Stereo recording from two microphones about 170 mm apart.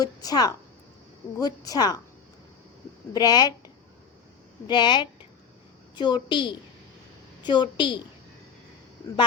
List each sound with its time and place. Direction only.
0.0 s a woman's voice: 20° left (ahead or behind)
3.1 s a woman's voice: 25° left (ahead or behind)
4.6 s a woman's voice: 25° left (ahead or behind)